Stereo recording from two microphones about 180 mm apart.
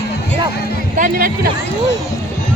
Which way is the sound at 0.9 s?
50° right (ahead or behind).